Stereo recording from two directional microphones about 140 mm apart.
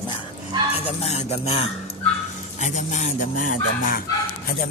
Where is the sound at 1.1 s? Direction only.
50° left (ahead or behind); by 4.0 s 85° left.